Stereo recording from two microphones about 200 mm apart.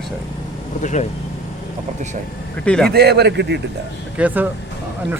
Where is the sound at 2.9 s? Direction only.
55° right (ahead or behind).